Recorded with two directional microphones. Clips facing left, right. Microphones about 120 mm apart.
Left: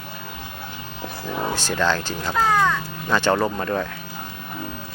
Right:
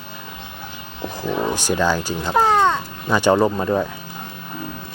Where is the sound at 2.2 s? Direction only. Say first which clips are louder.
Right 4 dB; 25° right (ahead or behind).